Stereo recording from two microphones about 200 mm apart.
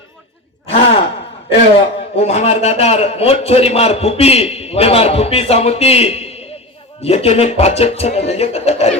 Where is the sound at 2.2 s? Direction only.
30° left (ahead or behind).